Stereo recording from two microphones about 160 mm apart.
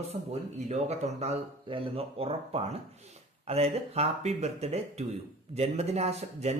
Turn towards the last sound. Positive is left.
turn(degrees=-40)  # may be behind; listen again after turning